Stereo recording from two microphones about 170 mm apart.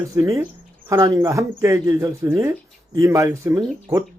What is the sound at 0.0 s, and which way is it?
Speech, 20° right (ahead or behind).